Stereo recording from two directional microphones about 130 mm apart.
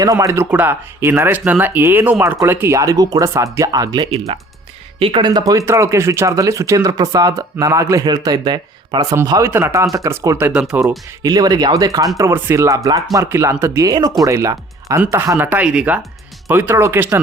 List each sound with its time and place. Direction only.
0.0 s speech: 25° right (ahead or behind); by 10.9 s 10° right (ahead or behind)
11.2 s speech: 30° right (ahead or behind)